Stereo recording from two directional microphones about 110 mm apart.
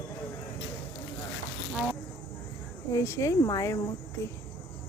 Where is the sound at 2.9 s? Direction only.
25° left (ahead or behind).